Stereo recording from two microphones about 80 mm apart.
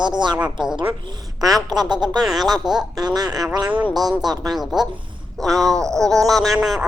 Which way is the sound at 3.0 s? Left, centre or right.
Right.